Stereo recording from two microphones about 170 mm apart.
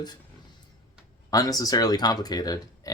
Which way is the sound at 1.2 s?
20° left (ahead or behind).